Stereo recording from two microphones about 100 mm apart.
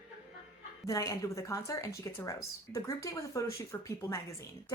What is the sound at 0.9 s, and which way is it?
Speech, 35° left (ahead or behind).